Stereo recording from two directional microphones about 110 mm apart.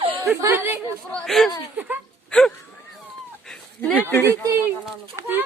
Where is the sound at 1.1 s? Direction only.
5° left (ahead or behind).